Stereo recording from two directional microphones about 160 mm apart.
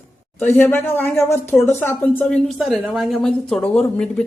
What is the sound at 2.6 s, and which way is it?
A woman's voice, centre (ahead or behind).